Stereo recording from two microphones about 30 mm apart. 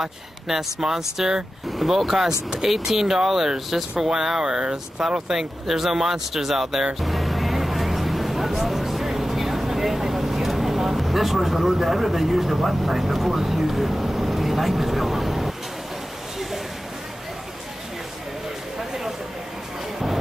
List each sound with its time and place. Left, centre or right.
0.0 s speech: centre
7.0 s vehicle: centre
11.0 s speech: centre
14.8 s vehicle: centre